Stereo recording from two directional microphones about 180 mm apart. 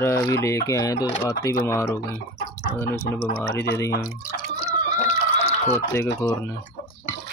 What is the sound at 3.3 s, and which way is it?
Speech, 10° left (ahead or behind).